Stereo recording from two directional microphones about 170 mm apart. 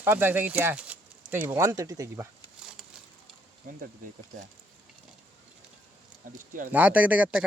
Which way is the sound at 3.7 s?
50° right (ahead or behind).